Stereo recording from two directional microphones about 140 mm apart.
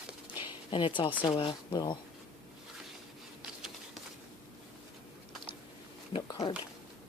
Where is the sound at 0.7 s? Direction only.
35° left (ahead or behind).